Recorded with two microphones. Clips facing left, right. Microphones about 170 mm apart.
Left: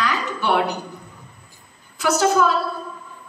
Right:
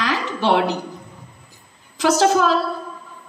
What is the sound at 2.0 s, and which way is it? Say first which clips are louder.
Speech: right 2 dB; 90° right.